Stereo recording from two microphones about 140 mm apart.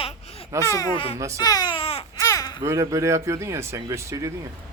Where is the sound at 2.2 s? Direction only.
25° left (ahead or behind).